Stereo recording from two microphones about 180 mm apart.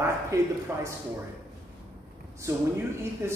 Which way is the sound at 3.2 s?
15° right (ahead or behind).